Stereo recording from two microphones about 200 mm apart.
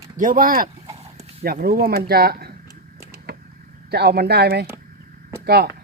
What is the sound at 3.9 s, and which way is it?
Speech, 50° right (ahead or behind).